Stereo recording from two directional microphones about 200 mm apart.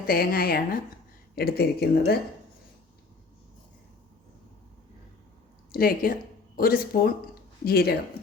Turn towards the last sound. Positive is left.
turn(degrees=50)  # may be behind; listen again after turning